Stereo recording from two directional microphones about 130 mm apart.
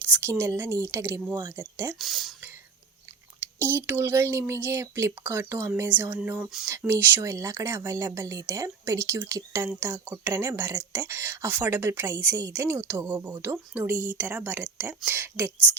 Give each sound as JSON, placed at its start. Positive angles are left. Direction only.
{"t": 0.0, "sound": "speech", "side_deg": -15}
{"t": 2.0, "sound": "speech", "side_deg": 0}
{"t": 3.4, "sound": "speech", "side_deg": -20}